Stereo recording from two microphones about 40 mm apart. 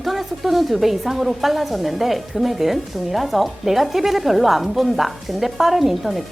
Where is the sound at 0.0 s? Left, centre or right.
Centre.